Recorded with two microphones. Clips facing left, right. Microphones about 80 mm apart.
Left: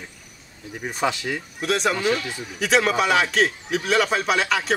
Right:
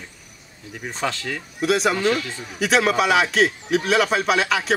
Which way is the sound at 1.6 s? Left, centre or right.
Centre.